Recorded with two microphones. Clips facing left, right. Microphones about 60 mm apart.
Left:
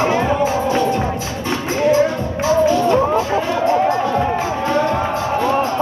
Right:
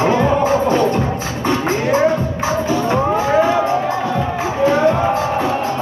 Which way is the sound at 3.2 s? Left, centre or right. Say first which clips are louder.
Right 3 dB; right.